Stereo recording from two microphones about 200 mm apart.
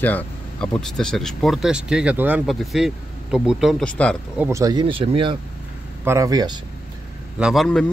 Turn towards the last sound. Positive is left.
turn(degrees=0)  # may be behind; listen again after turning